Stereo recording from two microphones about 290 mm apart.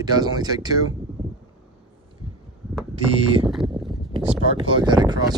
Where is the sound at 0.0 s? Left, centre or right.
Centre.